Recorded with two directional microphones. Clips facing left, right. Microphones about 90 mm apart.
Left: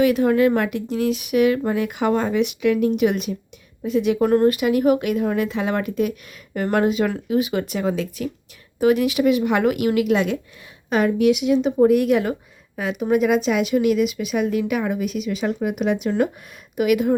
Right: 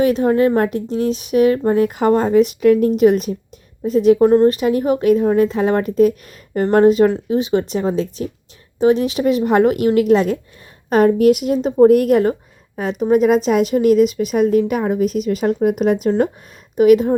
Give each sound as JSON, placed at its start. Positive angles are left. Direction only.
{"t": 0.0, "sound": "speech", "side_deg": -30}